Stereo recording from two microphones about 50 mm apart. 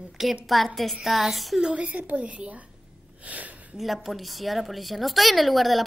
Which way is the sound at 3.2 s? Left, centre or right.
Right.